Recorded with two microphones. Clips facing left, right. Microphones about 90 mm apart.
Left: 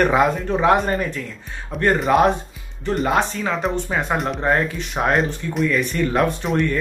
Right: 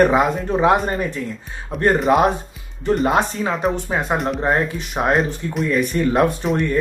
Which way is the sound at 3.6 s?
5° right (ahead or behind).